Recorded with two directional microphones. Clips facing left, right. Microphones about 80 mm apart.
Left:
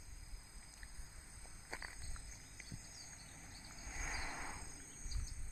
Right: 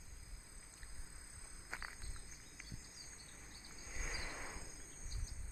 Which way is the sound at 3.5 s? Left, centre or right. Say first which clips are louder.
Left 2 dB; centre.